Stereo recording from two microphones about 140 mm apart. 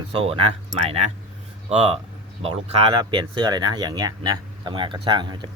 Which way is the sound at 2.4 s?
45° right (ahead or behind).